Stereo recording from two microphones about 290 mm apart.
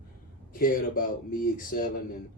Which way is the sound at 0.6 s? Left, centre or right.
Left.